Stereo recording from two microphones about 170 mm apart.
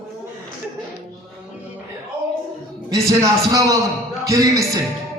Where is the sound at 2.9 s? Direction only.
20° right (ahead or behind).